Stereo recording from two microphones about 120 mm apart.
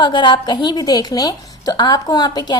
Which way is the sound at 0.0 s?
40° left (ahead or behind).